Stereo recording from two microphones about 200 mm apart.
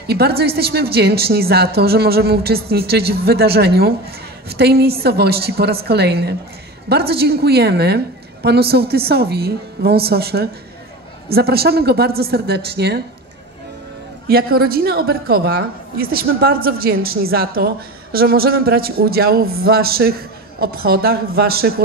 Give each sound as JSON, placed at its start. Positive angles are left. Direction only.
{"t": 0.0, "sound": "a woman's voice", "side_deg": -50}
{"t": 14.2, "sound": "a woman's voice", "side_deg": -50}